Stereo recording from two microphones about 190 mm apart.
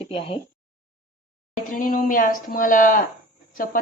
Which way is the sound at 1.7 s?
45° left (ahead or behind).